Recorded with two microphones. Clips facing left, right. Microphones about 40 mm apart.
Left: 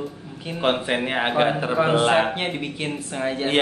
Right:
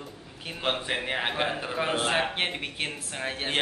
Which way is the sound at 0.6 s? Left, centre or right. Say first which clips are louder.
Left 7 dB; centre.